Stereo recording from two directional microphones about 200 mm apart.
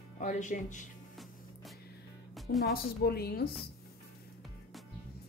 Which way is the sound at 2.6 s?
50° left (ahead or behind).